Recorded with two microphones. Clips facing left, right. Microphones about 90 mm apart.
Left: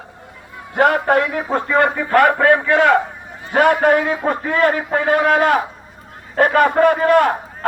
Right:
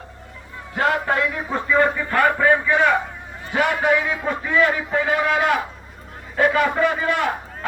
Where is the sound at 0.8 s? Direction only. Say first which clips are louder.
Left 6 dB; 55° left (ahead or behind); by 3.0 s 90° left.